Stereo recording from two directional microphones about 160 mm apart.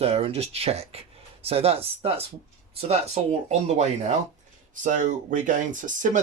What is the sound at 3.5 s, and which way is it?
Speech, 45° right (ahead or behind).